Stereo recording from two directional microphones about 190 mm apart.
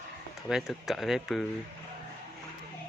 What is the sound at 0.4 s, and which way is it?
Speech, centre (ahead or behind).